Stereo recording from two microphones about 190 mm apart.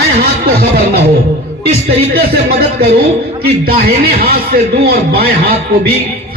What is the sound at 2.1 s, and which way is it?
A man's voice, 55° right (ahead or behind).